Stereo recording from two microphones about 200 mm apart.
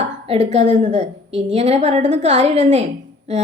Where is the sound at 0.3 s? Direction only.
35° right (ahead or behind).